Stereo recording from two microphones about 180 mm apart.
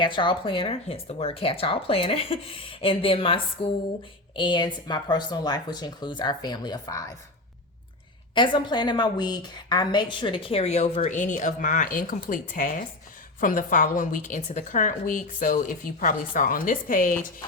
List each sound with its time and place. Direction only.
0.0 s a woman's voice: 25° left (ahead or behind)
8.4 s a woman's voice: 25° left (ahead or behind); by 17.3 s 50° left (ahead or behind)